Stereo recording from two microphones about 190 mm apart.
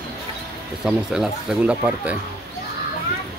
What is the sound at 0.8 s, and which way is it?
Speech, 5° right (ahead or behind).